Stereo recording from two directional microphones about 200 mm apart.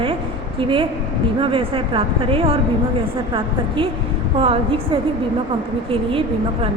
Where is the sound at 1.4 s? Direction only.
25° right (ahead or behind).